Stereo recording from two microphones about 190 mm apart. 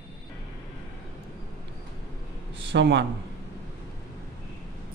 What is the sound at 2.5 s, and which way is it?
Speech, 70° right (ahead or behind).